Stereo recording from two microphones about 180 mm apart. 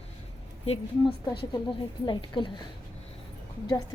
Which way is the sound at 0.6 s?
30° left (ahead or behind).